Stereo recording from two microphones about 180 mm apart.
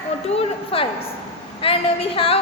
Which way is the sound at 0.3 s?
30° left (ahead or behind).